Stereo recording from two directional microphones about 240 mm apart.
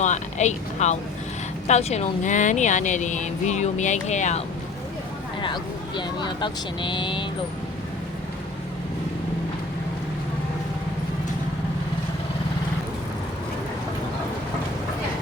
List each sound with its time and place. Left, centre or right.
0.0 s a woman's voice: left
6.0 s speech: centre